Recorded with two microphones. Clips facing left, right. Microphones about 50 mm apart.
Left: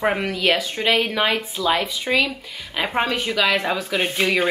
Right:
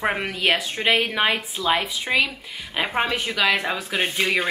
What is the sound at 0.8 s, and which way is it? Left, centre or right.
A woman's voice, centre.